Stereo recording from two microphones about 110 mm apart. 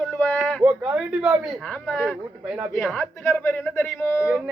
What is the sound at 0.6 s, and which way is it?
Speech, 15° right (ahead or behind).